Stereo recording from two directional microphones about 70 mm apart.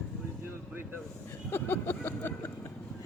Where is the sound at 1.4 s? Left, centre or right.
Left.